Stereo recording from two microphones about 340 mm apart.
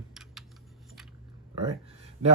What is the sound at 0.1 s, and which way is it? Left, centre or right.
Typing, centre.